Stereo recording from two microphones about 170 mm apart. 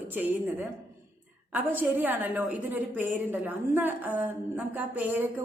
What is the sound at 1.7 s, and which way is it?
A woman's voice, 10° right (ahead or behind).